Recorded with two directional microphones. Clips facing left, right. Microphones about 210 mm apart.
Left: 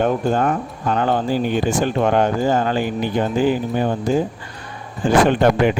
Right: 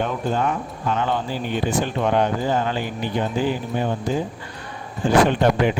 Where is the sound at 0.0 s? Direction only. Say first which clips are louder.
Left 5 dB; 50° left (ahead or behind).